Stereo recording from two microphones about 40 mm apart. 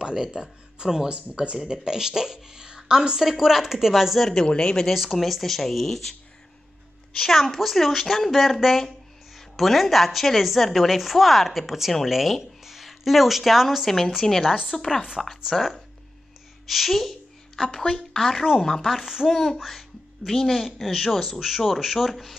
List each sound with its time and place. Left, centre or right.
0.1 s speech: centre
4.5 s speech: left
4.9 s a woman's voice: centre
7.2 s a woman's voice: centre
17.8 s speech: centre
18.8 s a woman's voice: centre
19.2 s a child's voice: centre
20.8 s a woman's voice: centre